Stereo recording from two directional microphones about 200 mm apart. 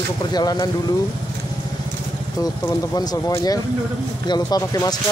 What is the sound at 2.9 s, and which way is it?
Speech, 20° left (ahead or behind).